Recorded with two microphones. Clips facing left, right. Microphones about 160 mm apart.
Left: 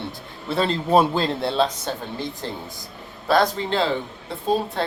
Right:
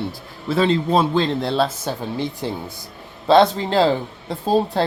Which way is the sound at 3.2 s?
25° right (ahead or behind).